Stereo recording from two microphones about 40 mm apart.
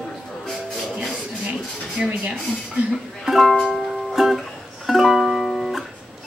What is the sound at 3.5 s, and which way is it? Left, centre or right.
Music, centre.